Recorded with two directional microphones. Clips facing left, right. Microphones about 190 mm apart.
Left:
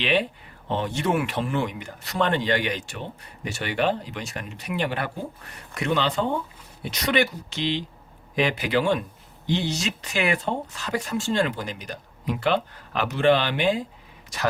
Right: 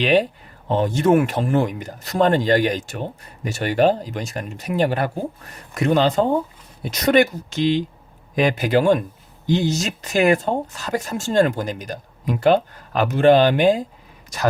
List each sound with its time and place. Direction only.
0.0 s speech: 40° right (ahead or behind)